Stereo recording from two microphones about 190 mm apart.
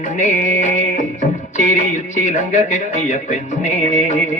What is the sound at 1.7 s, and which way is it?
A man's voice, 40° left (ahead or behind).